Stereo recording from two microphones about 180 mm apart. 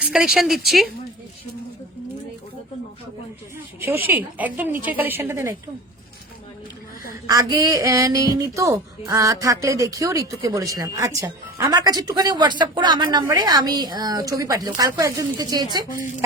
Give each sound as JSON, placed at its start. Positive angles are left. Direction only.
{"t": 0.0, "sound": "speech", "side_deg": -5}
{"t": 3.8, "sound": "speech", "side_deg": -15}
{"t": 7.3, "sound": "speech", "side_deg": -20}